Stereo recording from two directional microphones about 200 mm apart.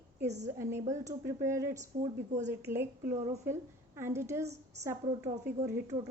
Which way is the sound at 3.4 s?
15° right (ahead or behind).